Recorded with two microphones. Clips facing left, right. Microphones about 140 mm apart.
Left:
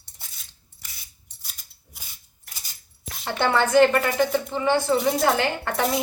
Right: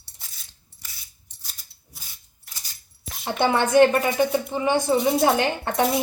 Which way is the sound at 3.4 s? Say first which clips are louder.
Right 1 dB; 15° right (ahead or behind).